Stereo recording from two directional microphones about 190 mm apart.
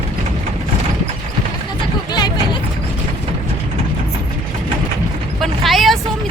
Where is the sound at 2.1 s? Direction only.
20° left (ahead or behind).